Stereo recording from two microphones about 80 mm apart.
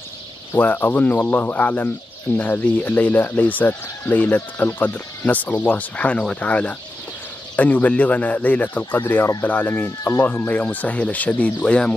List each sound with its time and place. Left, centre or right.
0.6 s speech: left
9.8 s speech: left; by 11.9 s centre